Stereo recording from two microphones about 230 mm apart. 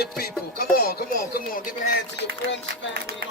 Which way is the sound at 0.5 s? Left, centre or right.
Left.